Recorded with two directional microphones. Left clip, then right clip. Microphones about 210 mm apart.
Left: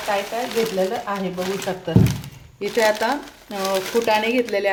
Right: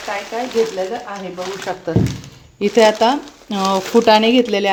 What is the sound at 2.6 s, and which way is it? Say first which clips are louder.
Speech: right 7 dB; 40° right (ahead or behind).